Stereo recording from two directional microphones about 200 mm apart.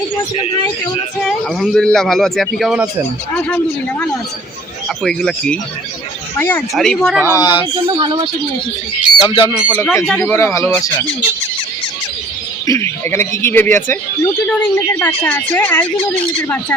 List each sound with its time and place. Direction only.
1.2 s a man's voice: centre (ahead or behind)
5.0 s a man's voice: 5° left (ahead or behind)
6.7 s a man's voice: centre (ahead or behind)
7.3 s speech: 20° left (ahead or behind)
7.8 s speech: 25° right (ahead or behind)
9.0 s speech: 20° left (ahead or behind)
9.7 s speech: 10° left (ahead or behind)
12.6 s speech: 15° left (ahead or behind)